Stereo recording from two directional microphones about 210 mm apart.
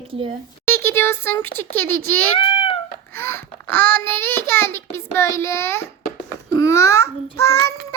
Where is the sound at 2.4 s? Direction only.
25° left (ahead or behind).